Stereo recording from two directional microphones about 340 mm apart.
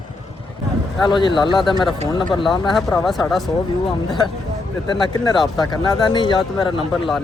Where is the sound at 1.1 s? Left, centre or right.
Centre.